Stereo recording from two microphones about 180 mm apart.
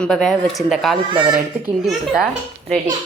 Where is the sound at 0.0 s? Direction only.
Centre (ahead or behind).